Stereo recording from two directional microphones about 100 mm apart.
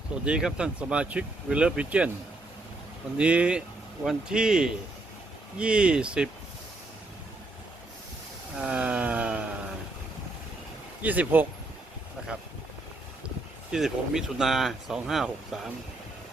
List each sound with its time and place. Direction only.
0.3 s speech: 10° right (ahead or behind)
3.2 s speech: 10° right (ahead or behind)
8.5 s a sound: 10° right (ahead or behind)
11.0 s speech: 15° right (ahead or behind)
13.7 s speech: 5° right (ahead or behind)